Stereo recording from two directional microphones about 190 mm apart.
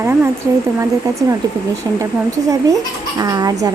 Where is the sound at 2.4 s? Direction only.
20° right (ahead or behind).